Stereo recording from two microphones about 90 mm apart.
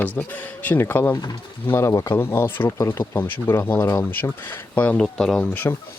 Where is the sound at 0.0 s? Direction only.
15° left (ahead or behind).